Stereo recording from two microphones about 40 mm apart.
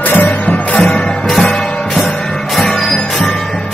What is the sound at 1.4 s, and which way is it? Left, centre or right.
Music, centre.